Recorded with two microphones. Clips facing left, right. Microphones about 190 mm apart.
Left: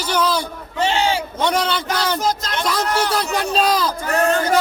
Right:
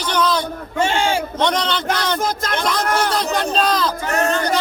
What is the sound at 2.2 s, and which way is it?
Speech, 55° right (ahead or behind).